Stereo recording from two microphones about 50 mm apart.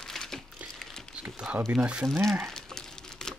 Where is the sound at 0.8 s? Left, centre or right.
Centre.